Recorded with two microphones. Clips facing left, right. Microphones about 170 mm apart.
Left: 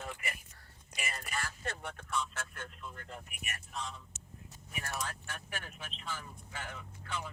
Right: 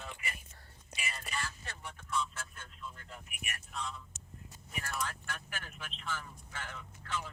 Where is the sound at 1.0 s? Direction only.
50° left (ahead or behind).